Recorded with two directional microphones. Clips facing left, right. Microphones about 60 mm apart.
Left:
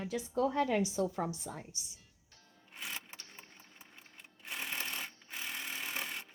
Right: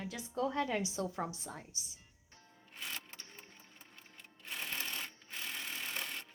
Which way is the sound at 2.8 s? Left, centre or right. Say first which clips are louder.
Left 1 dB; centre.